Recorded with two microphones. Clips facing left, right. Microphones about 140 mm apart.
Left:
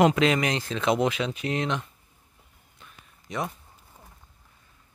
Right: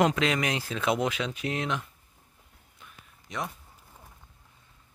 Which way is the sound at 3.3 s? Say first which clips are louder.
Left 4 dB; centre (ahead or behind).